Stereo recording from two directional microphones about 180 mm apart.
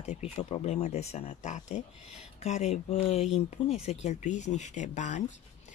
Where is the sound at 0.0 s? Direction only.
40° left (ahead or behind).